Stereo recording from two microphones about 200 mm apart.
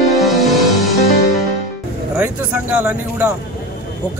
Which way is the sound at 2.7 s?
10° right (ahead or behind).